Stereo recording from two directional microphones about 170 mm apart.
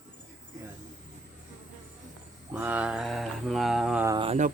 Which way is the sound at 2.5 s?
10° right (ahead or behind).